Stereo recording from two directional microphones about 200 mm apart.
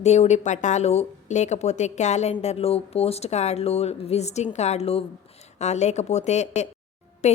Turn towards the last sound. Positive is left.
turn(degrees=35)  # may be behind; listen again after turning